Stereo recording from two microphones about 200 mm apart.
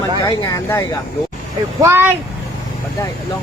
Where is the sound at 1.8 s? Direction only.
10° right (ahead or behind).